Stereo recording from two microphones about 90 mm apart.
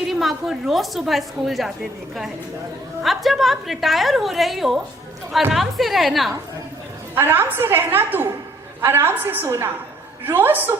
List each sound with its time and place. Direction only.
0.1 s a woman's voice: centre (ahead or behind)
3.0 s a woman's voice: centre (ahead or behind)
7.2 s a woman's voice: 25° right (ahead or behind)